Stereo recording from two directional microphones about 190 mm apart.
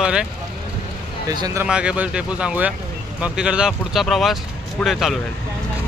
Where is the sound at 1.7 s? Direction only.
5° right (ahead or behind).